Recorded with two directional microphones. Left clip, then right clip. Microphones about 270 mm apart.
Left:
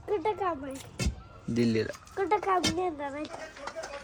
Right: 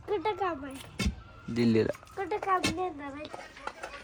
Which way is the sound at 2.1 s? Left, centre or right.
Left.